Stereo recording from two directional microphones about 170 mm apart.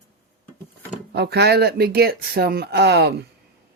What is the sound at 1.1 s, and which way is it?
Speech, 75° right (ahead or behind).